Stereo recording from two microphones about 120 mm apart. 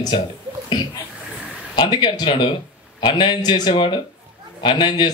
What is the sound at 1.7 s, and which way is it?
A man's voice, 40° left (ahead or behind).